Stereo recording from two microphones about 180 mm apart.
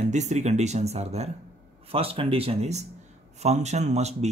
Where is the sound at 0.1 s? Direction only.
40° right (ahead or behind).